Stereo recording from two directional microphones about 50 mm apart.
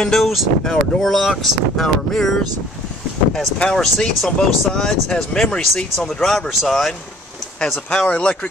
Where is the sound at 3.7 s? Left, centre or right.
Centre.